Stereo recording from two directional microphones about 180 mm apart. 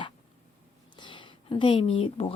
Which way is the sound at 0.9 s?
25° left (ahead or behind).